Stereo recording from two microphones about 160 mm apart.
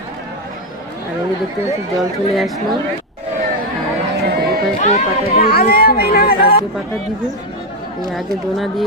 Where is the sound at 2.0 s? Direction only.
Centre (ahead or behind).